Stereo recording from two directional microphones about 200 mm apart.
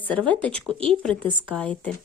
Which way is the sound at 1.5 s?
5° left (ahead or behind).